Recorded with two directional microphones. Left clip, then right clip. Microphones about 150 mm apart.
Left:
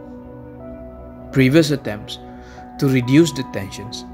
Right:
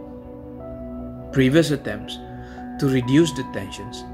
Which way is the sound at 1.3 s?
60° left (ahead or behind).